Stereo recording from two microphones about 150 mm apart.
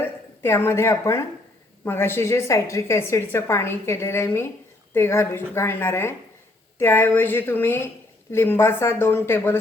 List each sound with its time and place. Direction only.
0.0 s a woman's voice: 15° left (ahead or behind)